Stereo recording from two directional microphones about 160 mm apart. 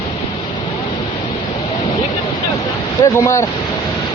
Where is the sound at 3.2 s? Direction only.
20° left (ahead or behind).